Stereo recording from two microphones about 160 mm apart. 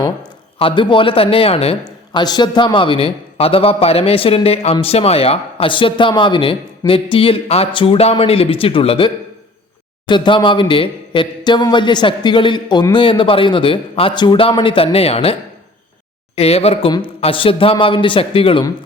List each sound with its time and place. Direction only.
0.6 s a man's voice: 30° left (ahead or behind)
1.8 s a man's voice: 25° left (ahead or behind)